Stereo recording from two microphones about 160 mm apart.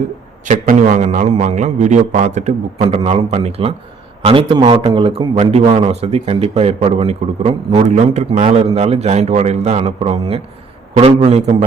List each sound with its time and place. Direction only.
0.4 s a man's voice: 60° right (ahead or behind); by 11.5 s 40° right (ahead or behind)